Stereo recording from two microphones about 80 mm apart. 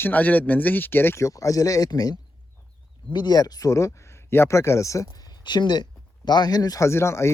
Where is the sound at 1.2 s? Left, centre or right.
Left.